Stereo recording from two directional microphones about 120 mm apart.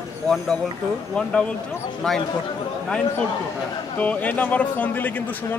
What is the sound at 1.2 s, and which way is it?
Speech, 10° left (ahead or behind).